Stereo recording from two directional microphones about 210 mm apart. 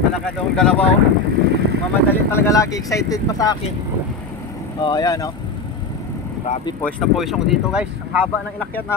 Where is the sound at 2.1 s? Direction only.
10° left (ahead or behind).